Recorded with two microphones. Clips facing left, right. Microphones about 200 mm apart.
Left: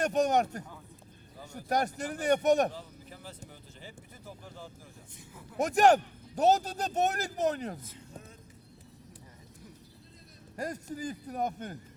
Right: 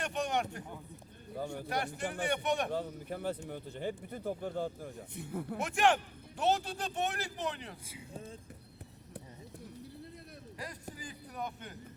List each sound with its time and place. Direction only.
0.0 s speech: 40° left (ahead or behind)
2.7 s speech: 60° right (ahead or behind)
5.5 s speech: 40° left (ahead or behind)
7.9 s speech: 10° right (ahead or behind)
10.6 s speech: 45° left (ahead or behind)